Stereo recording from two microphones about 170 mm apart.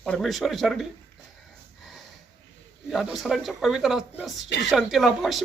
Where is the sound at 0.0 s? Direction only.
Centre (ahead or behind).